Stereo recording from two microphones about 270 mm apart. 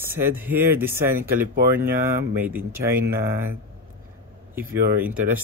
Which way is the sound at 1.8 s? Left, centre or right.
Right.